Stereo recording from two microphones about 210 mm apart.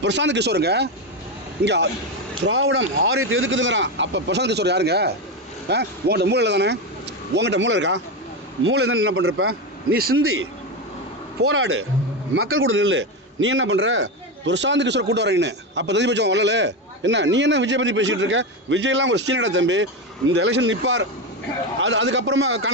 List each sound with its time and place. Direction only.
0.0 s a man's voice: 55° right (ahead or behind)
2.5 s a man's voice: 70° right (ahead or behind)
8.6 s a man's voice: 75° right (ahead or behind); by 9.6 s 90° right
9.9 s speech: 45° right (ahead or behind)
11.4 s a man's voice: 75° right (ahead or behind)